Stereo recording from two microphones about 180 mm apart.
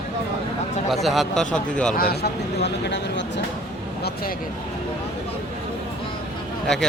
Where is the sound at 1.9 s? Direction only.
60° left (ahead or behind).